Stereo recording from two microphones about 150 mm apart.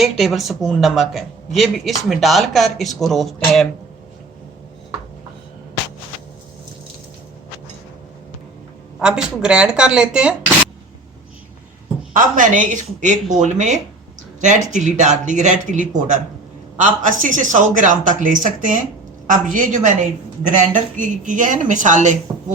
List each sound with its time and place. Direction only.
0.0 s speech: centre (ahead or behind)
9.0 s speech: 5° right (ahead or behind)
12.1 s speech: 60° right (ahead or behind)